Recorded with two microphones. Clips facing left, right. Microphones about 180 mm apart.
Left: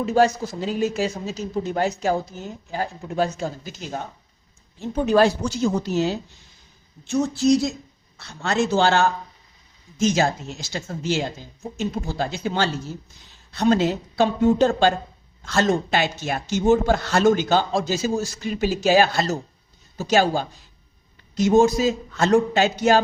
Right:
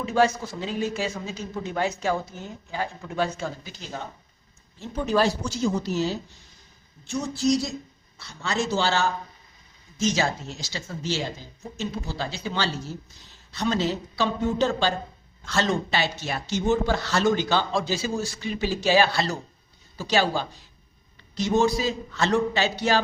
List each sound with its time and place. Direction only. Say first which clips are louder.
0.0 s speech: left 3 dB; 40° left (ahead or behind)
3.2 s speech: left 3 dB; 40° left (ahead or behind)
5.1 s speech: left 5 dB; 60° left (ahead or behind)
8.7 s speech: left 6 dB; 55° left (ahead or behind)